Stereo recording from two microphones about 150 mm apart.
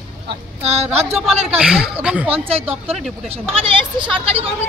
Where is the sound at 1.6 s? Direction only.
5° right (ahead or behind).